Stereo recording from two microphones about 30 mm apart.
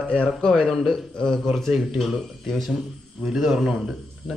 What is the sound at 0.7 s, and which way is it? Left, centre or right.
Speech, centre.